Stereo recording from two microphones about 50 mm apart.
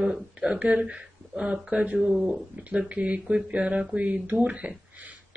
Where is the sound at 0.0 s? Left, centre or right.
Centre.